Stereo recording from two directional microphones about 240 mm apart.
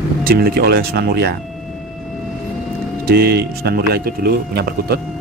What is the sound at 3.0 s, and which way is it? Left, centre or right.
Speech, right.